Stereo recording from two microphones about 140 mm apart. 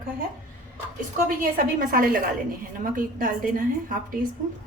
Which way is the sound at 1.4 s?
90° right.